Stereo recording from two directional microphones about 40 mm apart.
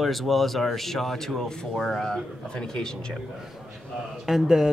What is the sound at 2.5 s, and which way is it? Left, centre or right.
Speech, centre.